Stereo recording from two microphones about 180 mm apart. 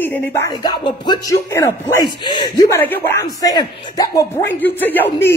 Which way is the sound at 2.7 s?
10° left (ahead or behind).